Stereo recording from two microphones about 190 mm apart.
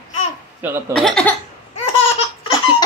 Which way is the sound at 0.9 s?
5° left (ahead or behind).